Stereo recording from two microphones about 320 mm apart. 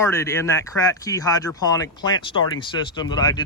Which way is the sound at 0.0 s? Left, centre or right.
Centre.